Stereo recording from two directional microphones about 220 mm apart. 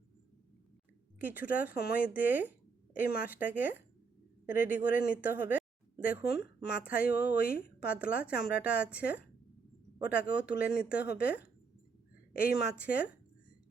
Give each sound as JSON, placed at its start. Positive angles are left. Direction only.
{"t": 1.2, "sound": "speech", "side_deg": -10}
{"t": 6.0, "sound": "speech", "side_deg": 40}
{"t": 6.8, "sound": "speech", "side_deg": -5}
{"t": 10.2, "sound": "speech", "side_deg": -5}